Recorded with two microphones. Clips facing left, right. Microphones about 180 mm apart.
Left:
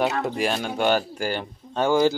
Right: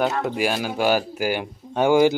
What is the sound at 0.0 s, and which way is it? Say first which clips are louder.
Speech: right 1 dB; centre (ahead or behind).